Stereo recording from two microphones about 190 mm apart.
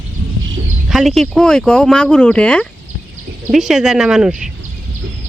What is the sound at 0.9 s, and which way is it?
Speech, centre (ahead or behind).